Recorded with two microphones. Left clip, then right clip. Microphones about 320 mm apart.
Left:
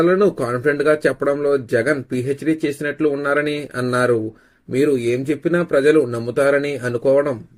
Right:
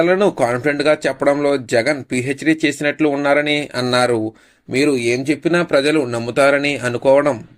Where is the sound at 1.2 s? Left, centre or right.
Right.